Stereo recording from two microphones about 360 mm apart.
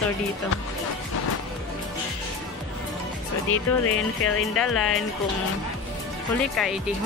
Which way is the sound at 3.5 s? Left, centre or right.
Left.